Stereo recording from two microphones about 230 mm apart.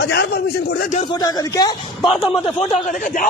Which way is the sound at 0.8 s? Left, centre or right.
Left.